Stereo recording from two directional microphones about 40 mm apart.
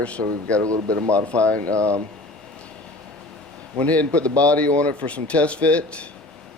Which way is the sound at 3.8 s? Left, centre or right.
Left.